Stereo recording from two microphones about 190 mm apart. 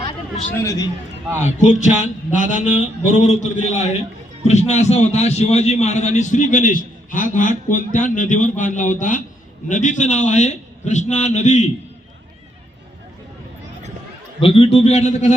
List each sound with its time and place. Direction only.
0.6 s a man's voice: 15° left (ahead or behind)
1.4 s a man's voice: 40° left (ahead or behind)
14.4 s a man's voice: 30° left (ahead or behind)